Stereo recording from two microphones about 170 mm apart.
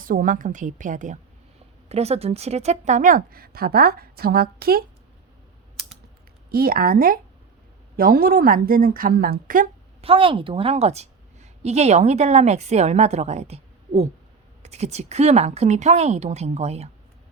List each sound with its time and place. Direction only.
0.0 s a woman's voice: 55° right (ahead or behind)
1.9 s a woman's voice: 40° right (ahead or behind); by 4.9 s 60° right (ahead or behind)
6.5 s a woman's voice: 60° right (ahead or behind)
10.0 s a woman's voice: 35° right (ahead or behind)